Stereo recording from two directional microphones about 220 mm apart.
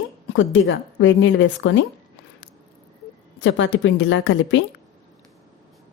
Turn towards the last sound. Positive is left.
turn(degrees=55)  # may be behind; listen again after turning